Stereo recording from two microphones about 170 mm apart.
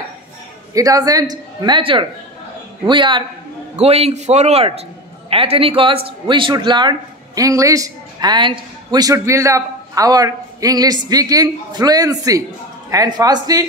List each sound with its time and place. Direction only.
0.7 s a man's voice: 20° right (ahead or behind)